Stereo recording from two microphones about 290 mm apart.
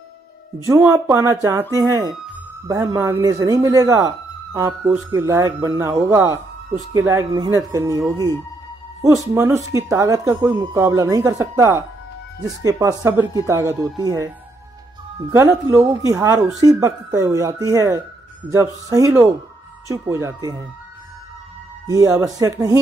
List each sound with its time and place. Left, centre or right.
0.7 s speech: centre
8.0 s speech: centre
9.0 s speech: centre
15.3 s speech: centre
21.8 s speech: centre